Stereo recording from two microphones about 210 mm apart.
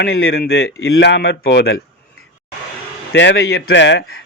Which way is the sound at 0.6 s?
75° left (ahead or behind).